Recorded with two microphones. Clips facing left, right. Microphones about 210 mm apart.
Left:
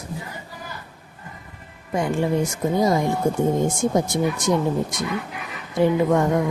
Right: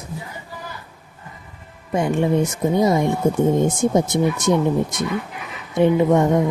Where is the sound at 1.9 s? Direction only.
20° right (ahead or behind).